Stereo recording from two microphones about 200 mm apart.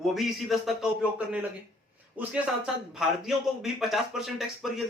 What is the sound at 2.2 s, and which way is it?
A man's voice, 5° right (ahead or behind).